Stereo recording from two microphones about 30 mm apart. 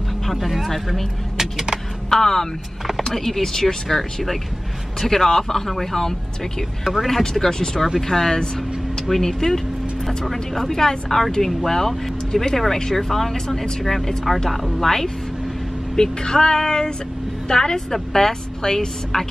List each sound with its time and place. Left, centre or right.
0.3 s speech: centre
1.4 s speech: centre
2.0 s speech: centre
6.8 s speech: centre
7.1 s speech: centre
16.0 s music: left
17.9 s speech: centre